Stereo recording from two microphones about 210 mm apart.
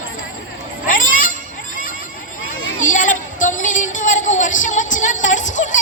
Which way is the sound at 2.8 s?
35° left (ahead or behind).